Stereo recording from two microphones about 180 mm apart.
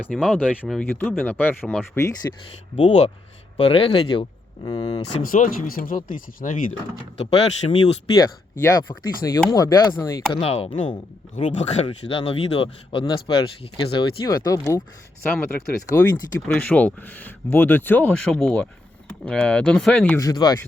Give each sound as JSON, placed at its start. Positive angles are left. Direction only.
{"t": 0.0, "sound": "speech", "side_deg": 0}
{"t": 2.2, "sound": "speech", "side_deg": 15}
{"t": 2.7, "sound": "speech", "side_deg": 35}
{"t": 5.2, "sound": "speech", "side_deg": 50}
{"t": 7.2, "sound": "speech", "side_deg": 35}
{"t": 8.6, "sound": "speech", "side_deg": 20}
{"t": 10.4, "sound": "speech", "side_deg": 35}
{"t": 15.9, "sound": "speech", "side_deg": 20}
{"t": 16.5, "sound": "speech", "side_deg": 10}
{"t": 20.1, "sound": "speech", "side_deg": 20}